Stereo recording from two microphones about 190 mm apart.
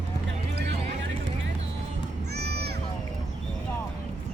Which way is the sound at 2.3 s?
60° right (ahead or behind).